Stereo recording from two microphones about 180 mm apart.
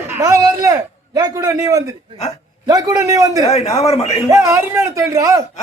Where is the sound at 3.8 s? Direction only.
35° left (ahead or behind).